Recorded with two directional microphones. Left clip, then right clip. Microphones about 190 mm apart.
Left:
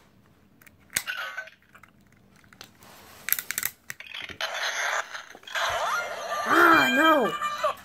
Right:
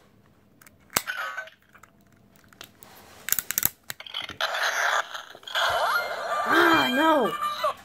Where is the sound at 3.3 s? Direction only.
20° right (ahead or behind).